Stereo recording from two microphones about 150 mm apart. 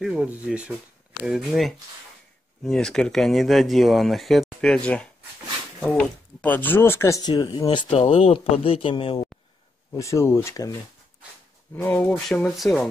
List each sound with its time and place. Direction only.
0.0 s speech: 5° right (ahead or behind)
6.4 s speech: 10° left (ahead or behind); by 8.0 s 30° left (ahead or behind)
8.0 s speech: 40° left (ahead or behind)
9.9 s speech: 20° left (ahead or behind)
11.7 s speech: 10° left (ahead or behind)